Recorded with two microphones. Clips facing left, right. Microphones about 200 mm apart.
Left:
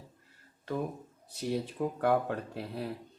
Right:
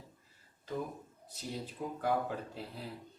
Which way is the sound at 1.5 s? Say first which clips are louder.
Left 8 dB; 65° left (ahead or behind).